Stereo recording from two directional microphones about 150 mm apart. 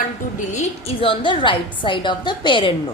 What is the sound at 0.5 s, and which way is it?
A woman's voice, 40° left (ahead or behind).